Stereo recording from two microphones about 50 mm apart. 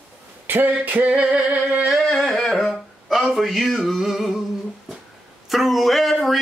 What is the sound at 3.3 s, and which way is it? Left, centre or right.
Music, centre.